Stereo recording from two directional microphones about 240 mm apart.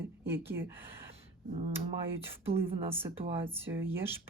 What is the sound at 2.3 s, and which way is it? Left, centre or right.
Speech, centre.